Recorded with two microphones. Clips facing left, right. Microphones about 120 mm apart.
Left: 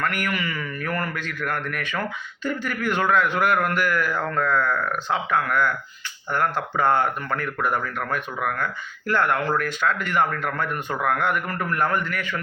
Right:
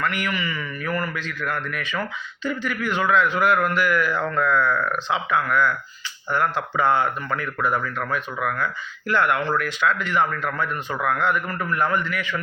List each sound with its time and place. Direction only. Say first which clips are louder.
0.0 s speech: even; 50° left (ahead or behind)